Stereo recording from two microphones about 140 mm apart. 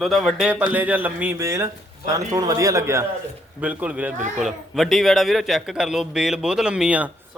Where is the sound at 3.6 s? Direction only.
10° right (ahead or behind).